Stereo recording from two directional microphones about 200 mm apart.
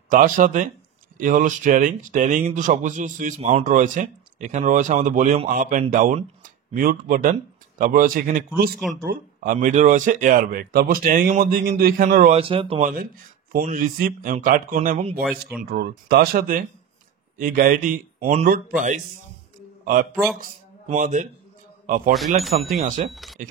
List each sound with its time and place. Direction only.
0.1 s speech: 40° right (ahead or behind)
3.3 s a man's voice: 30° right (ahead or behind)
12.4 s speech: 25° right (ahead or behind)
15.2 s speech: centre (ahead or behind)
15.6 s a man's voice: 50° right (ahead or behind)
22.1 s speech: centre (ahead or behind)
22.8 s speech: 40° right (ahead or behind)
23.0 s speech: centre (ahead or behind)